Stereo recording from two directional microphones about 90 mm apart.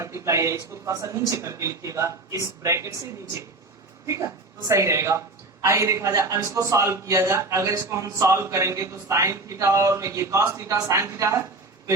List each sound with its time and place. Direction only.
0.0 s a man's voice: 30° right (ahead or behind)
4.7 s a man's voice: 30° right (ahead or behind)